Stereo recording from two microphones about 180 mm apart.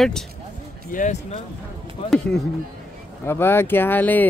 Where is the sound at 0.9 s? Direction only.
45° left (ahead or behind).